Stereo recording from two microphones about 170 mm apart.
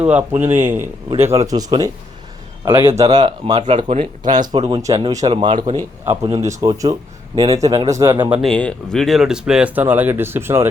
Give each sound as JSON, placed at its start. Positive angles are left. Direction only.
{"t": 0.0, "sound": "speech", "side_deg": -10}
{"t": 3.2, "sound": "speech", "side_deg": -35}
{"t": 4.2, "sound": "speech", "side_deg": -25}
{"t": 4.9, "sound": "speech", "side_deg": -35}
{"t": 5.5, "sound": "speech", "side_deg": -45}
{"t": 6.6, "sound": "speech", "side_deg": -30}
{"t": 8.4, "sound": "speech", "side_deg": 5}